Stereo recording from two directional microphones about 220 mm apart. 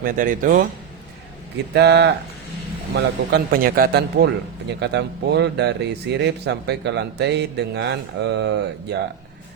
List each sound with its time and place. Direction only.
0.0 s a man's voice: 35° right (ahead or behind)
1.7 s speech: 50° right (ahead or behind)